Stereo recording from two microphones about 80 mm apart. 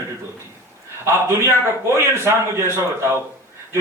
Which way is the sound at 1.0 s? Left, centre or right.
Right.